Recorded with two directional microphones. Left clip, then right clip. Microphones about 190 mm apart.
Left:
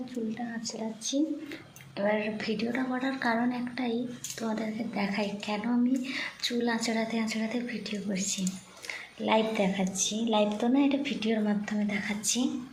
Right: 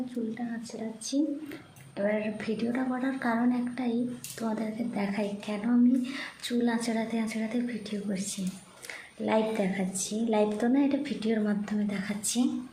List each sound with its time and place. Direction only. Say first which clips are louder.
1.1 s a woman's voice: even; 20° right (ahead or behind)